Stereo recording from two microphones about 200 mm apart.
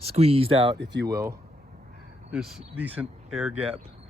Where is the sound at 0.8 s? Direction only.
60° right (ahead or behind).